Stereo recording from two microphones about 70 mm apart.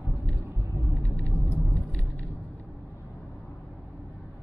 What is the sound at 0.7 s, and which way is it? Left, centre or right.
Rumble, right.